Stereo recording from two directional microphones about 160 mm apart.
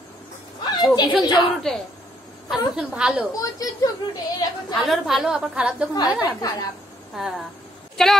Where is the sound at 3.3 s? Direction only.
20° left (ahead or behind).